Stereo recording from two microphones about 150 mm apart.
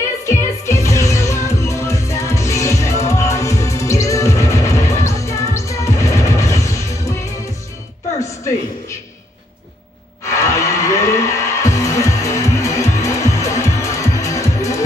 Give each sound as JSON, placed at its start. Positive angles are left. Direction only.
{"t": 0.2, "sound": "music", "side_deg": 20}
{"t": 10.2, "sound": "music", "side_deg": 20}